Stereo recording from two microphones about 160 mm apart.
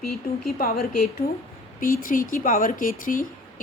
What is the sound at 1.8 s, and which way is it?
Speech, 60° left (ahead or behind).